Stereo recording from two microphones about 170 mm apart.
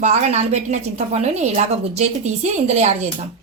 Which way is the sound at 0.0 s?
45° right (ahead or behind).